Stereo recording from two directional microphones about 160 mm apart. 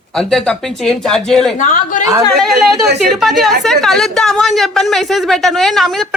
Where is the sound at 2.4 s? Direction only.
Centre (ahead or behind).